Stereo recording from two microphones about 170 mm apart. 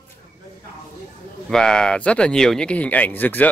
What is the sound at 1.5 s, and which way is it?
Speech, 5° left (ahead or behind).